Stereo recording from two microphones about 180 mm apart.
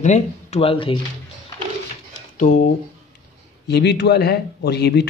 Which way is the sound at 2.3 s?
45° left (ahead or behind).